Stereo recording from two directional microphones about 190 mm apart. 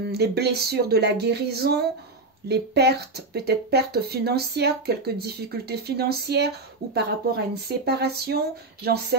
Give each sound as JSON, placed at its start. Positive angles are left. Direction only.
{"t": 0.0, "sound": "speech", "side_deg": -60}